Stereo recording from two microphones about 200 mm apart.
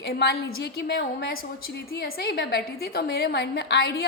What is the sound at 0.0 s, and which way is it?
A woman's voice, 55° left (ahead or behind).